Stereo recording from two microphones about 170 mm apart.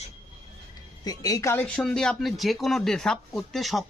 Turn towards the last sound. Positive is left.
turn(degrees=0)  # may be behind; listen again after turning